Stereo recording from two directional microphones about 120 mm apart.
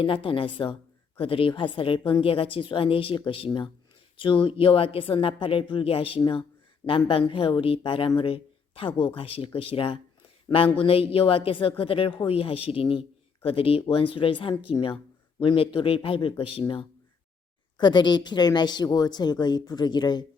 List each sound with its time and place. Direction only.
0.0 s a man's voice: 50° left (ahead or behind)
17.7 s a woman's voice: 40° left (ahead or behind)